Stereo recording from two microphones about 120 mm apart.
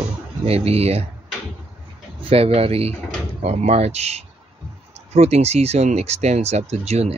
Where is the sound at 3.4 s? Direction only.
70° right (ahead or behind).